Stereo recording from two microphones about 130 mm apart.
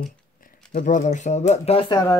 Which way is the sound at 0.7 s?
75° left (ahead or behind).